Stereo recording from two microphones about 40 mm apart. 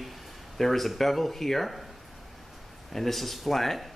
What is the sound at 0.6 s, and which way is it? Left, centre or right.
Speech, centre.